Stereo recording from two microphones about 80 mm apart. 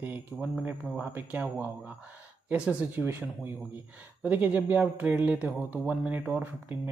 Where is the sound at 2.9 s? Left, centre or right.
Right.